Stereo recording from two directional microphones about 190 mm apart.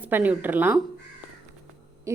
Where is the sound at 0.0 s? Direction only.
10° right (ahead or behind).